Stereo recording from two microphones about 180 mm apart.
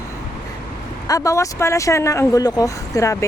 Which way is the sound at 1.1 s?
15° left (ahead or behind).